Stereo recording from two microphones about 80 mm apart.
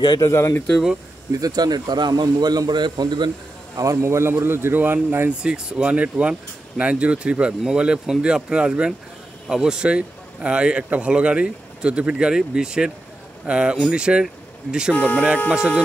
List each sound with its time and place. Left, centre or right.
0.2 s speech: left
1.4 s a man's voice: right
3.7 s speech: right
5.4 s speech: centre
15.0 s speech: left
15.5 s speech: centre